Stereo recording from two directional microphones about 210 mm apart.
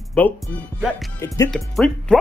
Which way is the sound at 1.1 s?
15° left (ahead or behind).